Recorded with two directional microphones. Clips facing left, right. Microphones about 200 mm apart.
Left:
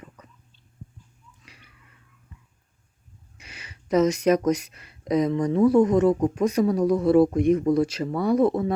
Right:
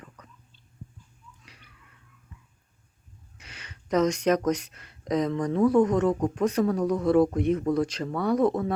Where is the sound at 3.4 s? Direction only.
10° left (ahead or behind).